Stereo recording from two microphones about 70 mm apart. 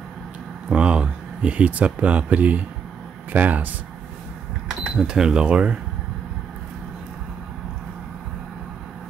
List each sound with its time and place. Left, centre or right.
0.7 s a sound: centre
1.9 s speech: centre
4.6 s speech: centre